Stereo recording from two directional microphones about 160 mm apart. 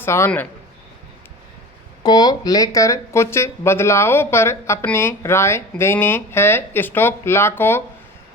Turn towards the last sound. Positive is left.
turn(degrees=15)  # may be behind; listen again after turning